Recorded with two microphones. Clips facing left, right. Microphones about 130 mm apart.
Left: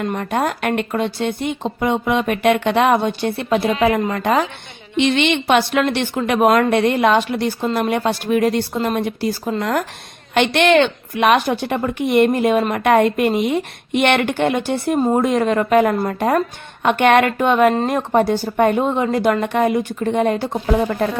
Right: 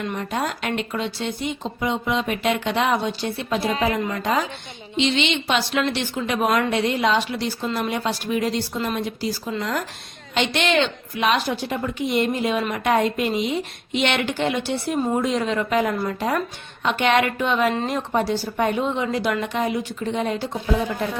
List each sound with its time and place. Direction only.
0.0 s a woman's voice: 55° left (ahead or behind)